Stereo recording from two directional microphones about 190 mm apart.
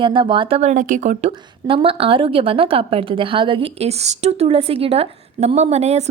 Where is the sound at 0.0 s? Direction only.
25° right (ahead or behind).